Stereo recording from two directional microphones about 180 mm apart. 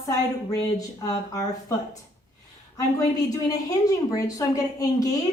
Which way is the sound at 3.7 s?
20° left (ahead or behind).